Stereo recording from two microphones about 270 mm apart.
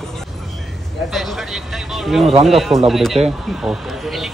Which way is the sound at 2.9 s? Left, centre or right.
Centre.